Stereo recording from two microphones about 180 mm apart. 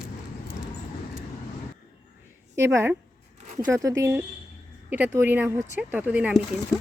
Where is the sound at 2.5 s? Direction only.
15° right (ahead or behind).